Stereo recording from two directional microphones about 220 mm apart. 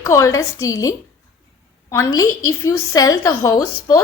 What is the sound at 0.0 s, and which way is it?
Speech, 15° left (ahead or behind).